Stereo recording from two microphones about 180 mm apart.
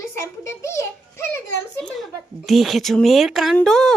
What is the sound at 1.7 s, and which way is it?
A woman's voice, centre (ahead or behind).